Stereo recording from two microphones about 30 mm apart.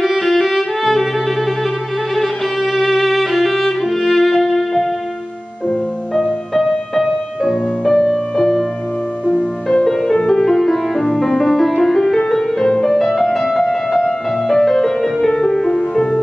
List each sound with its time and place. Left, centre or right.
0.0 s music: centre
2.1 s violin: centre
6.6 s music: centre
10.2 s music: centre
13.5 s music: centre